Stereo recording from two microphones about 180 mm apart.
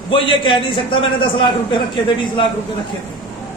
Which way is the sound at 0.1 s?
30° left (ahead or behind).